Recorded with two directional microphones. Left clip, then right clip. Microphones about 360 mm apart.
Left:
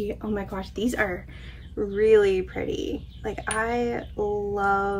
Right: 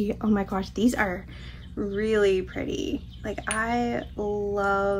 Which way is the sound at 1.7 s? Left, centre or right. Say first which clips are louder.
Left 6 dB; centre.